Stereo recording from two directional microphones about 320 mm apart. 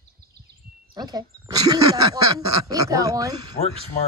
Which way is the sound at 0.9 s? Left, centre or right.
Centre.